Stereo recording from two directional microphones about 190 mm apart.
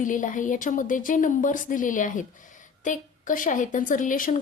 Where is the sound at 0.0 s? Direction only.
45° left (ahead or behind).